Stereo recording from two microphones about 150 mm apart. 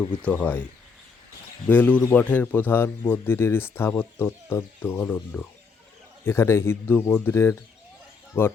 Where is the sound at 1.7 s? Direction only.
10° left (ahead or behind).